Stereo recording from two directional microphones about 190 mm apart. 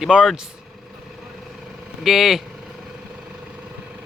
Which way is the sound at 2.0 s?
Centre (ahead or behind).